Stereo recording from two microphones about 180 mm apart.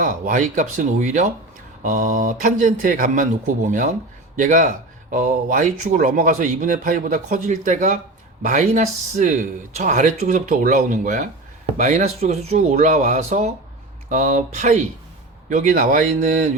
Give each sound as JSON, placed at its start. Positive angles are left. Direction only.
{"t": 0.0, "sound": "speech", "side_deg": -45}